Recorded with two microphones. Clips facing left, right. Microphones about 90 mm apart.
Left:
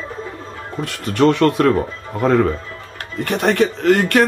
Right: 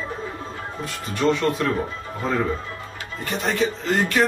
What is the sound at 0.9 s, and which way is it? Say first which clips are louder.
Speech: left 7 dB; 65° left (ahead or behind).